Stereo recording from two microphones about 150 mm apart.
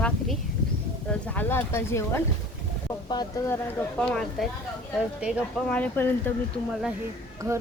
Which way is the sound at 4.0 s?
5° left (ahead or behind).